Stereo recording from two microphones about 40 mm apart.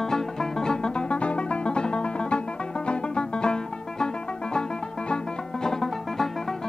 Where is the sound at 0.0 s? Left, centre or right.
Centre.